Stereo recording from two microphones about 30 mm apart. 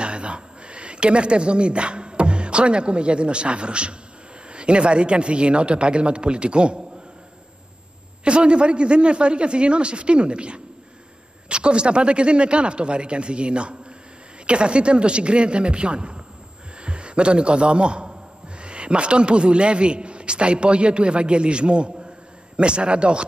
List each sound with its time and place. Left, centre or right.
0.0 s a man's voice: right
8.2 s a man's voice: right